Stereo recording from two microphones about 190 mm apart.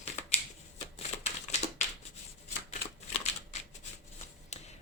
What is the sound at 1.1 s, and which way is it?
Typewriter, 35° left (ahead or behind).